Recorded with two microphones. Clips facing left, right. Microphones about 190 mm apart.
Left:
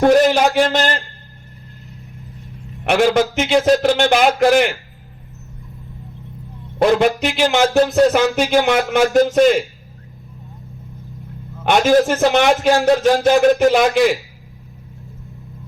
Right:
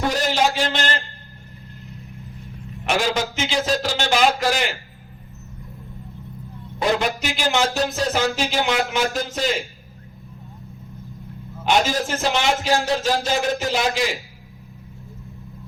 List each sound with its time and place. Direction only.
0.0 s a man's voice: 55° left (ahead or behind)
0.8 s a man's voice: 45° left (ahead or behind)
2.8 s a man's voice: 60° left (ahead or behind)
6.7 s a man's voice: 60° left (ahead or behind)
11.6 s a man's voice: 55° left (ahead or behind)